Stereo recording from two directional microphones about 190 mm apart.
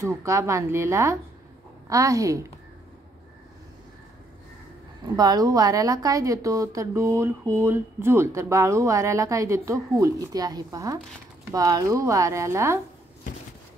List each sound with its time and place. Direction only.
0.0 s a woman's voice: 15° right (ahead or behind)
5.1 s a woman's voice: 20° right (ahead or behind)